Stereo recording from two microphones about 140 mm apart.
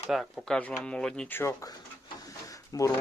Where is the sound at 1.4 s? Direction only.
25° left (ahead or behind).